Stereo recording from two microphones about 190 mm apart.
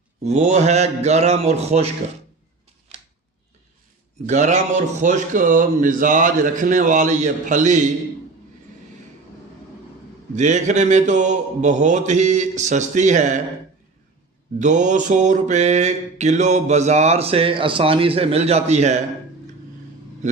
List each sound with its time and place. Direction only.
0.2 s mantra: 35° right (ahead or behind)
4.3 s a man's voice: 40° right (ahead or behind)
10.3 s mantra: 40° right (ahead or behind)
14.6 s mantra: 40° right (ahead or behind)